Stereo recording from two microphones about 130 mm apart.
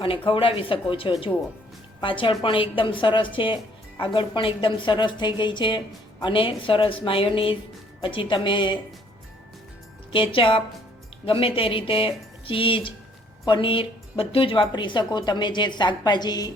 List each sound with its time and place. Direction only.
0.3 s a woman's voice: 45° left (ahead or behind)
10.1 s a woman's voice: 40° left (ahead or behind)